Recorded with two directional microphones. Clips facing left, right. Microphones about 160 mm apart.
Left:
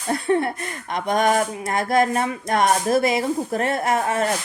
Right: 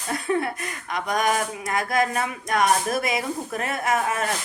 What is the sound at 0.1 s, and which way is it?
Speech, 30° left (ahead or behind).